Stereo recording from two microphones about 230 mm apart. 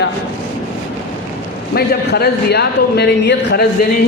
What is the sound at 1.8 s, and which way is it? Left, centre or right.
A man's voice, left.